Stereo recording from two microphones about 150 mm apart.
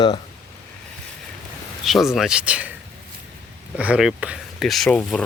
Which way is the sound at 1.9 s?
Centre (ahead or behind).